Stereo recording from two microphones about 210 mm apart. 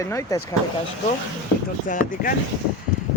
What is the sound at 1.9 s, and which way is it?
Speech, 40° left (ahead or behind).